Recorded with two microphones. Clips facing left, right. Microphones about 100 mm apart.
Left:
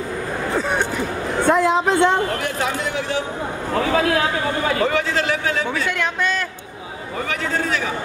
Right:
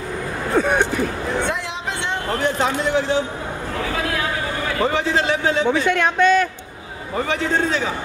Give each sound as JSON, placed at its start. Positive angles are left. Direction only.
{"t": 0.6, "sound": "speech", "side_deg": -15}
{"t": 1.4, "sound": "a sound", "side_deg": 45}
{"t": 2.4, "sound": "a man's voice", "side_deg": -30}
{"t": 4.8, "sound": "a man's voice", "side_deg": -25}